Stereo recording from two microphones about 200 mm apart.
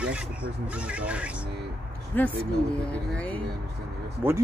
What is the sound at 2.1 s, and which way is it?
Speech, 10° left (ahead or behind).